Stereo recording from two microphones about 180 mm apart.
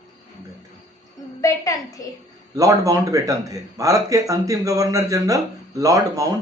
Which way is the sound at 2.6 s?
20° right (ahead or behind).